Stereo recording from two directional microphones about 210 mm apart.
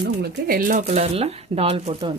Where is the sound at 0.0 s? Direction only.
50° right (ahead or behind); by 2.1 s 30° right (ahead or behind).